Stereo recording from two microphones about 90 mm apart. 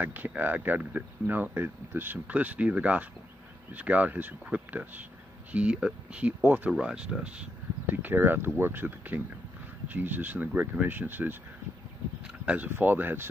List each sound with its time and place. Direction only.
0.0 s speech: 20° right (ahead or behind)
12.4 s speech: 20° right (ahead or behind)